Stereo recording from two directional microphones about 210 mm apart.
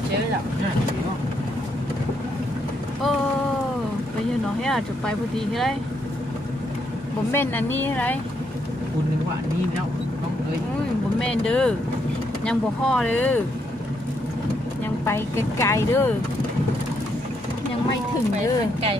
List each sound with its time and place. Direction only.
4.6 s speech: centre (ahead or behind)
7.3 s a woman's voice: 10° left (ahead or behind)
11.1 s speech: 5° left (ahead or behind)
15.0 s a woman's voice: 10° left (ahead or behind)
18.3 s speech: 30° right (ahead or behind)